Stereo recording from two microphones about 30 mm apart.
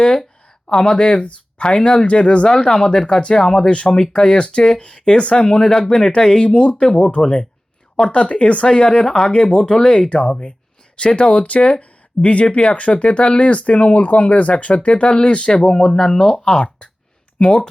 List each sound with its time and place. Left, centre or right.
0.7 s speech: left
0.9 s speech: left
3.2 s speech: left
6.9 s speech: left
7.2 s speech: left
8.1 s speech: left
9.0 s speech: centre
9.3 s speech: left
15.5 s speech: centre